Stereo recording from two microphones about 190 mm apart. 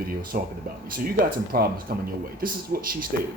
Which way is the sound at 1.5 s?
50° right (ahead or behind).